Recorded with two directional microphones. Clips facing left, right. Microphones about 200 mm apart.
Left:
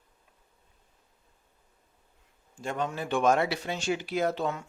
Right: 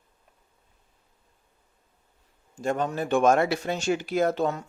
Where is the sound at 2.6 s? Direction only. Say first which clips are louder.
Right 5 dB; 45° right (ahead or behind).